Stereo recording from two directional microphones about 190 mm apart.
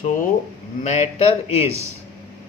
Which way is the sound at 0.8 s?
35° left (ahead or behind).